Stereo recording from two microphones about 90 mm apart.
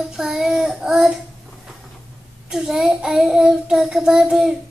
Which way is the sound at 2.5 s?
5° right (ahead or behind).